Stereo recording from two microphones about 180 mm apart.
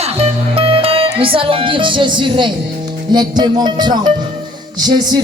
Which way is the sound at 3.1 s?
25° right (ahead or behind).